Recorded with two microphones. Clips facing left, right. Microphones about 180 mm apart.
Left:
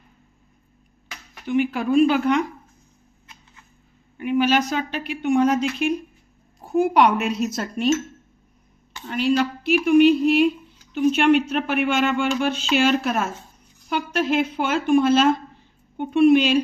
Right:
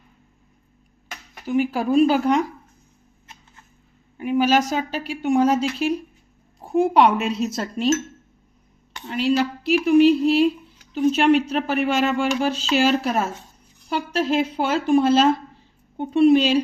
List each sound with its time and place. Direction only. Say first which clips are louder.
1.5 s speech: even; 40° right (ahead or behind)
4.2 s speech: right 1 dB; 40° right (ahead or behind)
9.0 s speech: even; 30° right (ahead or behind)